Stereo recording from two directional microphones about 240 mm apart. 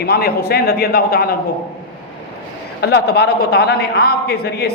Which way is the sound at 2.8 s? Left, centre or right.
Left.